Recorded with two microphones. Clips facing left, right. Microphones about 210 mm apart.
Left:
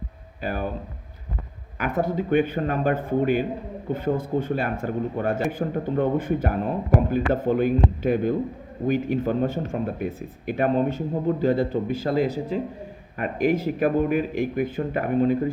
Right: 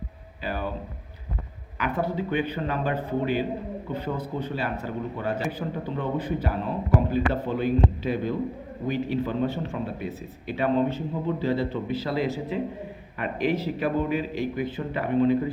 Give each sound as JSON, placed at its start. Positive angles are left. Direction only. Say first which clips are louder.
{"t": 0.4, "sound": "a man's voice", "louder": "left 3 dB", "side_deg": 50}
{"t": 1.8, "sound": "a man's voice", "louder": "left 3 dB", "side_deg": 45}